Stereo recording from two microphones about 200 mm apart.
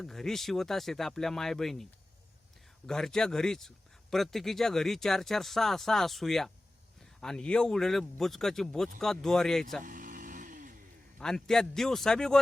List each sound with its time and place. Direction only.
0.0 s speech: centre (ahead or behind)
9.8 s vehicle: 40° right (ahead or behind)
11.2 s speech: 5° left (ahead or behind)